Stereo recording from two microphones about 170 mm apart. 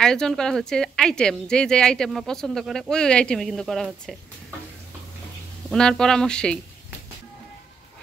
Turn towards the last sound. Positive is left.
turn(degrees=5)  # may be behind; listen again after turning